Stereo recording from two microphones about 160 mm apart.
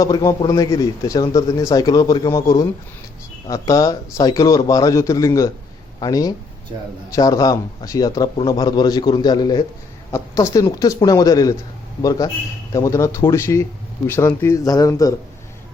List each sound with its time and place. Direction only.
0.0 s a man's voice: 20° left (ahead or behind)